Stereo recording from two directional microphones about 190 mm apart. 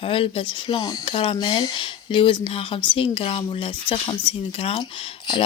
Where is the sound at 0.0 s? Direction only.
30° left (ahead or behind).